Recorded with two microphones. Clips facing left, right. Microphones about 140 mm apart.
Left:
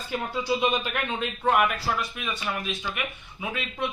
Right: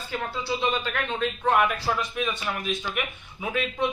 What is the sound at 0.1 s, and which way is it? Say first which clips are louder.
A man's voice: left 2 dB; 15° left (ahead or behind).